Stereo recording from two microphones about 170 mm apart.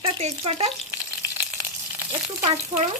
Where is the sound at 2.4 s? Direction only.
35° right (ahead or behind).